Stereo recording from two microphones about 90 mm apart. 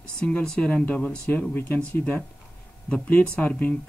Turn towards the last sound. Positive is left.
turn(degrees=15)  # may be behind; listen again after turning